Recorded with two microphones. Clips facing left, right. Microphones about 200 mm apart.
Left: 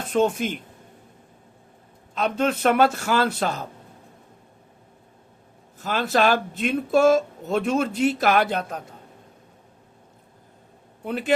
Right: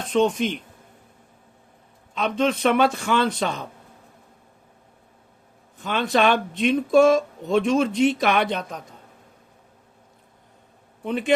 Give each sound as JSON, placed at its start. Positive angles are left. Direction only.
{"t": 0.0, "sound": "speech", "side_deg": 5}
{"t": 2.1, "sound": "speech", "side_deg": 5}
{"t": 5.7, "sound": "speech", "side_deg": 5}
{"t": 11.0, "sound": "speech", "side_deg": 5}